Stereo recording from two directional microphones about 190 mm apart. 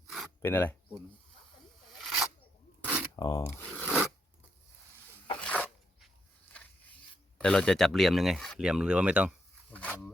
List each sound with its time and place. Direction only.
0.4 s speech: 10° left (ahead or behind)
2.0 s scissors: centre (ahead or behind)
2.8 s zipper: 5° right (ahead or behind)
3.2 s speech: 15° left (ahead or behind)
3.8 s scissors: centre (ahead or behind)
5.4 s a sound: 5° left (ahead or behind)
7.3 s speech: 5° left (ahead or behind)
9.7 s speech: 5° left (ahead or behind)